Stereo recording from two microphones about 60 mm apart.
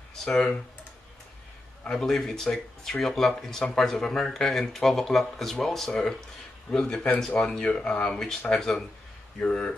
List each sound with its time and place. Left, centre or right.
0.2 s speech: centre
1.9 s speech: centre
7.6 s speech: centre